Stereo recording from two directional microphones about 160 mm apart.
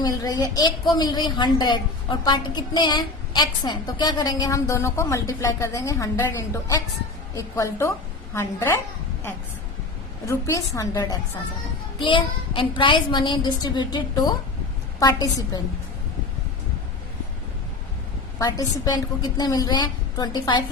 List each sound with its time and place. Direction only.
0.0 s a woman's voice: 25° left (ahead or behind)
10.2 s a woman's voice: 20° left (ahead or behind)
18.3 s a woman's voice: 25° left (ahead or behind)